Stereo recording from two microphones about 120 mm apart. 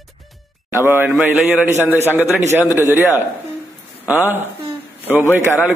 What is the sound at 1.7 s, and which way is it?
Speech, 20° left (ahead or behind).